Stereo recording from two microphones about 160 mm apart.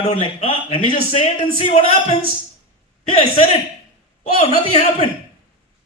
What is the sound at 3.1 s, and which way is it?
Speech, 35° left (ahead or behind).